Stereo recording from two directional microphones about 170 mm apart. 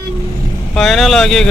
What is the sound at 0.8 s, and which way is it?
Speech, centre (ahead or behind).